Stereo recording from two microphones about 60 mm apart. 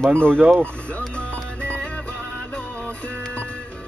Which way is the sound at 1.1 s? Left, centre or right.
Centre.